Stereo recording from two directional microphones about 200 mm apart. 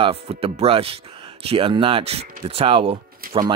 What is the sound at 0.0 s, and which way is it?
Speech, 30° right (ahead or behind).